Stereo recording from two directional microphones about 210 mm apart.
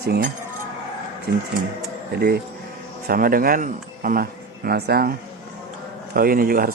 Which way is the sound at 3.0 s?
45° right (ahead or behind).